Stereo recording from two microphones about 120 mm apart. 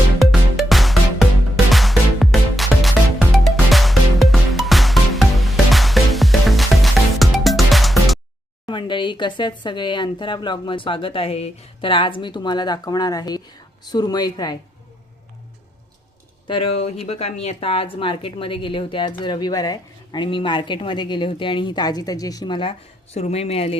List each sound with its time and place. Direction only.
0.2 s music: centre (ahead or behind)
8.6 s speech: 40° left (ahead or behind)
16.5 s a woman's voice: 55° left (ahead or behind)
23.1 s speech: 60° left (ahead or behind)